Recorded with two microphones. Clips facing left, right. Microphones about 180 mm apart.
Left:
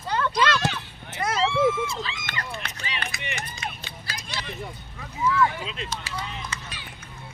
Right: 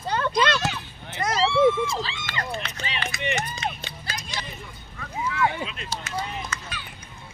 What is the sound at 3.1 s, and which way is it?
Run, 20° right (ahead or behind).